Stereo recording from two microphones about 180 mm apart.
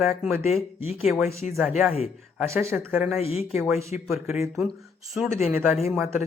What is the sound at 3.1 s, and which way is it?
Speech, 35° left (ahead or behind).